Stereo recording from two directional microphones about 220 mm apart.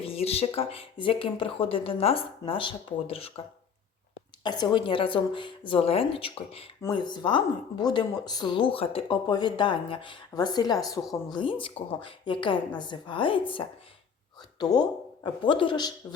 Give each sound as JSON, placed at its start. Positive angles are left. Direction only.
{"t": 0.0, "sound": "a woman's voice", "side_deg": 25}
{"t": 4.4, "sound": "a woman's voice", "side_deg": 20}